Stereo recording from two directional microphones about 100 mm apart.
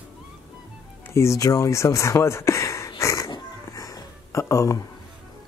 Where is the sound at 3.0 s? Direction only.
30° left (ahead or behind).